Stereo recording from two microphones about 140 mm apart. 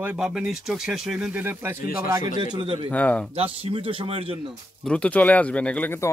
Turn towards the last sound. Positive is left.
turn(degrees=10)  # may be behind; listen again after turning